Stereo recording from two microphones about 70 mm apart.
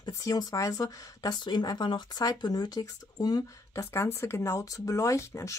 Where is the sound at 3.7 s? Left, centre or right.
Left.